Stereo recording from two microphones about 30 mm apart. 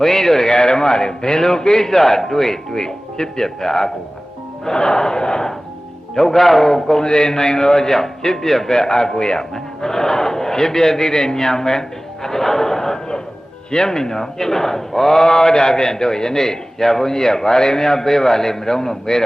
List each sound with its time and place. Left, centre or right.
0.0 s a man's voice: centre
6.1 s speech: centre
7.0 s a man's voice: left